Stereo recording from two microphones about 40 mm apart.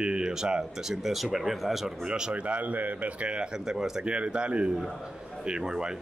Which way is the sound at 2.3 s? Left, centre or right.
Right.